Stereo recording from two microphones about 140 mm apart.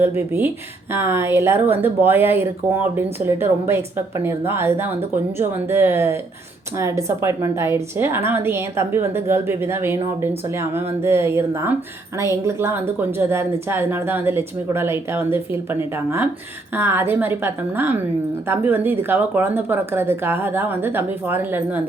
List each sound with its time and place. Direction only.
0.0 s a woman's voice: 15° right (ahead or behind)